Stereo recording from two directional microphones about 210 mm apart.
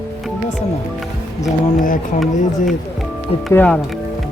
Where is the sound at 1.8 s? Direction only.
40° left (ahead or behind).